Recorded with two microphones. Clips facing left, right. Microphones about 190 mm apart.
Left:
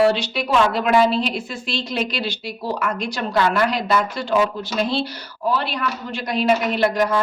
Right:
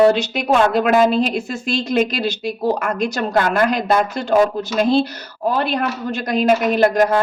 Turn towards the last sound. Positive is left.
turn(degrees=-50)  # may be behind; listen again after turning